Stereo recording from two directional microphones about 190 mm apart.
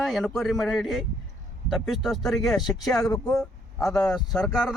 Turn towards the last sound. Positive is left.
turn(degrees=5)  # may be behind; listen again after turning